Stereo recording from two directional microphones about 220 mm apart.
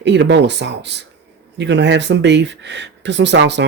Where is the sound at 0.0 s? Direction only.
55° right (ahead or behind).